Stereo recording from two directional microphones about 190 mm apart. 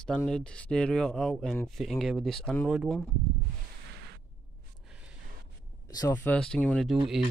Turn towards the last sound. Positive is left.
turn(degrees=5)  # may be behind; listen again after turning